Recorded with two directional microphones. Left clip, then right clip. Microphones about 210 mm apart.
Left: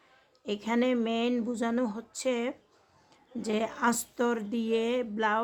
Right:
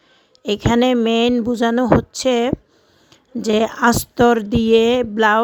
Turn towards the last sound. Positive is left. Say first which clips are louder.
# right 14 dB
turn(degrees=-40)  # may be behind; listen again after turning